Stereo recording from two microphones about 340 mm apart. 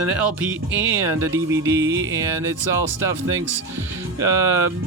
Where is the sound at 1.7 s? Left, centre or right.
Right.